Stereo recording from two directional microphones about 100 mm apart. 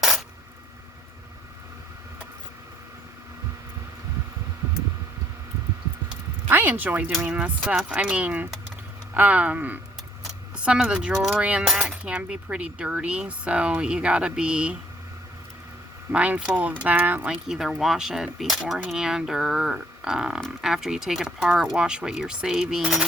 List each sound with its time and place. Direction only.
6.5 s speech: 20° right (ahead or behind)
16.1 s speech: 15° right (ahead or behind)
17.4 s speech: 5° right (ahead or behind)